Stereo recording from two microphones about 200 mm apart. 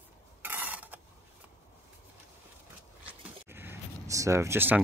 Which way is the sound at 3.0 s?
10° right (ahead or behind).